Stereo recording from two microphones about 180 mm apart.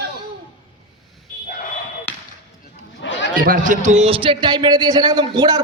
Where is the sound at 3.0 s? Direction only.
85° left.